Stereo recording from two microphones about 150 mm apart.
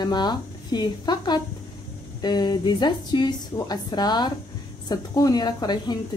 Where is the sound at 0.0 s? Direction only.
30° left (ahead or behind).